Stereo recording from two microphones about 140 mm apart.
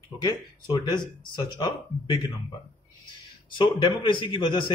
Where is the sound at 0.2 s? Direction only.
30° left (ahead or behind).